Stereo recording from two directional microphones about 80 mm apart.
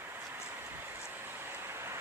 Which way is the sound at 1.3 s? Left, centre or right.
Right.